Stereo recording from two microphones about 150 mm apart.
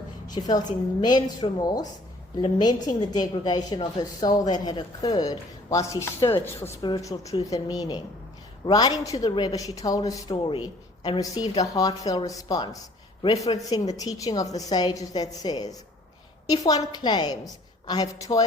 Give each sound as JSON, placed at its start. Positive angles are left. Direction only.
{"t": 0.3, "sound": "a woman's voice", "side_deg": 25}
{"t": 10.3, "sound": "a woman's voice", "side_deg": 35}